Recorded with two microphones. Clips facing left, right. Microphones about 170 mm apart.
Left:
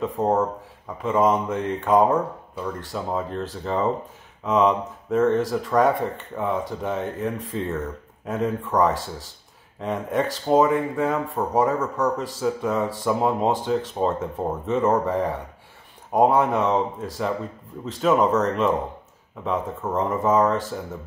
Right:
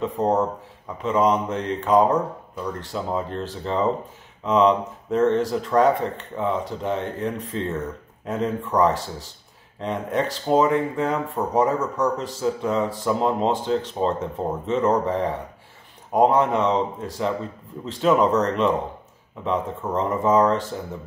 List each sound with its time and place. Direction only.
0.0 s speech: centre (ahead or behind)